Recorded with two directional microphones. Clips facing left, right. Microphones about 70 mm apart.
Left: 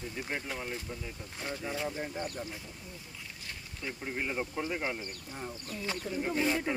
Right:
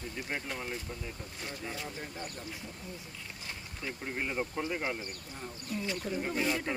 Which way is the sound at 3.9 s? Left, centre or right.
Centre.